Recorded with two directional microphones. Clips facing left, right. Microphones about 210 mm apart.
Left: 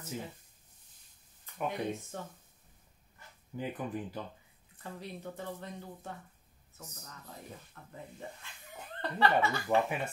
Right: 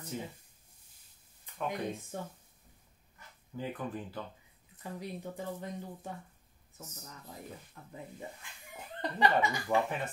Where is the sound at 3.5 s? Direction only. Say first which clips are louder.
Left 1 dB; 15° left (ahead or behind).